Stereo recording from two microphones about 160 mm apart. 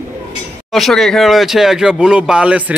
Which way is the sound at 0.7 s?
Centre (ahead or behind).